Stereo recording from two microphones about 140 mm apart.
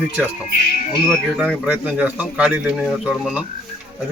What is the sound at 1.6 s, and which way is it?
Speech, 10° right (ahead or behind).